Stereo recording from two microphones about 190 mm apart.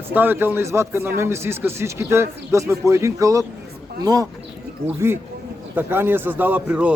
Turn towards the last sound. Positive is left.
turn(degrees=-10)  # may be behind; listen again after turning